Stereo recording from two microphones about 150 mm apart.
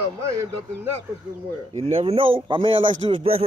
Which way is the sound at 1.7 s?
40° right (ahead or behind).